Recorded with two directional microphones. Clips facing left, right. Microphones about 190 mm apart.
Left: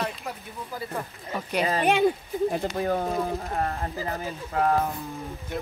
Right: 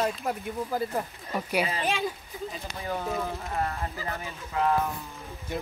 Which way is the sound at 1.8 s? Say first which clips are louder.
Left 8 dB; 60° left (ahead or behind).